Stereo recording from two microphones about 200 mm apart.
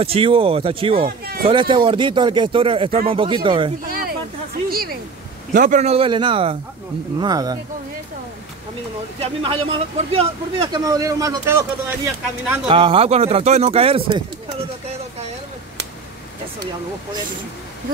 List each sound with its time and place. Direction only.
0.0 s speech: 30° right (ahead or behind)
1.0 s speech: 45° right (ahead or behind)
1.5 s speech: 25° right (ahead or behind)
3.8 s a sound: 45° right (ahead or behind)
5.5 s speech: 40° right (ahead or behind); by 7.5 s 20° right (ahead or behind)
9.2 s speech: 30° right (ahead or behind)
12.6 s speech: 25° right (ahead or behind)